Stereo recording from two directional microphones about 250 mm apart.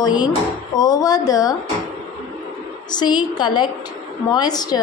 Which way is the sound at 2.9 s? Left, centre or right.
Centre.